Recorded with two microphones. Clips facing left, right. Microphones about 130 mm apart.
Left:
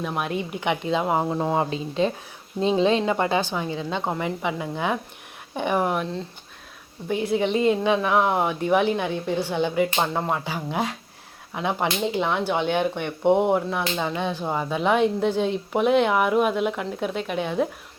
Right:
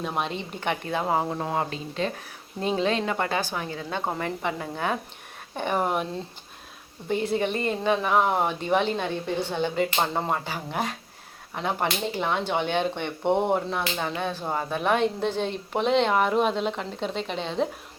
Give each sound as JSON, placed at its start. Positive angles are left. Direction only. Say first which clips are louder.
{"t": 0.0, "sound": "a woman's voice", "louder": "left 2 dB", "side_deg": 0}
{"t": 1.7, "sound": "speech", "louder": "left 5 dB", "side_deg": 30}
{"t": 4.2, "sound": "a woman's voice", "louder": "left 2 dB", "side_deg": 10}
{"t": 5.8, "sound": "speech", "louder": "left 2 dB", "side_deg": -5}
{"t": 7.1, "sound": "a woman's voice", "louder": "left 3 dB", "side_deg": 10}
{"t": 8.0, "sound": "speech", "louder": "left 2 dB", "side_deg": 0}
{"t": 8.4, "sound": "a woman's voice", "louder": "left 3 dB", "side_deg": 10}
{"t": 10.0, "sound": "speech", "louder": "left 2 dB", "side_deg": 0}
{"t": 10.4, "sound": "a woman's voice", "louder": "left 3 dB", "side_deg": 15}